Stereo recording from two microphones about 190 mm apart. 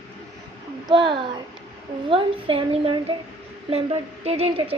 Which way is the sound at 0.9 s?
25° right (ahead or behind).